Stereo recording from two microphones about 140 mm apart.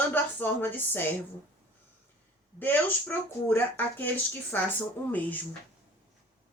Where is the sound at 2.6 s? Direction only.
15° left (ahead or behind).